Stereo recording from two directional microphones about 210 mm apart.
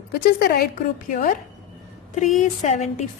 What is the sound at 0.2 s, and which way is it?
A woman's voice, 50° left (ahead or behind).